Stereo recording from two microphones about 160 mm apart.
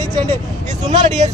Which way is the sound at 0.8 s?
45° right (ahead or behind).